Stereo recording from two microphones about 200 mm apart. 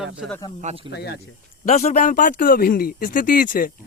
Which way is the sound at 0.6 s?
35° right (ahead or behind).